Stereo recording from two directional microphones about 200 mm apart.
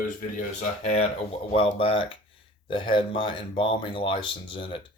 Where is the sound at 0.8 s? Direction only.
30° left (ahead or behind).